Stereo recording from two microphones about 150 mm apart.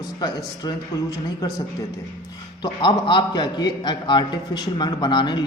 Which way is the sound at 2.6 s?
30° left (ahead or behind).